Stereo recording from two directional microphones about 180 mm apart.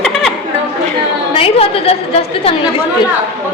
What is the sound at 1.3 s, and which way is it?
A woman's voice, 30° left (ahead or behind).